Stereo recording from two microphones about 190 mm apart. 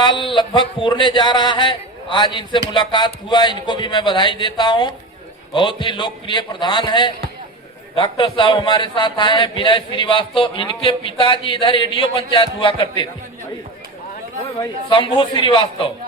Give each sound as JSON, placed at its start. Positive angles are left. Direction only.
{"t": 0.0, "sound": "a man's voice", "side_deg": 25}
{"t": 14.6, "sound": "a man's voice", "side_deg": 25}